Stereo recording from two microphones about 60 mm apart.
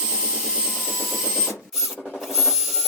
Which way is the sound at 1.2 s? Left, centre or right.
Centre.